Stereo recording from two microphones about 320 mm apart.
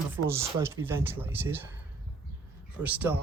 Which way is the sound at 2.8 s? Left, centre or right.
Centre.